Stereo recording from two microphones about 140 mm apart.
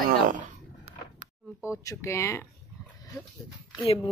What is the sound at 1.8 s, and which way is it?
Speech, 20° left (ahead or behind).